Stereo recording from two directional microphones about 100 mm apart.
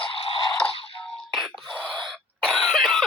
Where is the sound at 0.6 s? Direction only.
10° left (ahead or behind).